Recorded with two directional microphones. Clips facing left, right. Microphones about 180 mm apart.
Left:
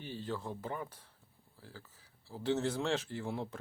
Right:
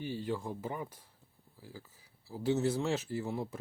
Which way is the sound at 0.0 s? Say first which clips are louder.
Right 4 dB; 10° right (ahead or behind).